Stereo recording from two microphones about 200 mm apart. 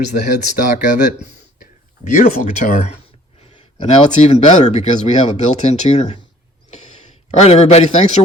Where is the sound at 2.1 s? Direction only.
35° left (ahead or behind).